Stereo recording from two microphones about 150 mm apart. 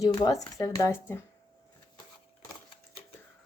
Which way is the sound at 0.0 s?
25° left (ahead or behind).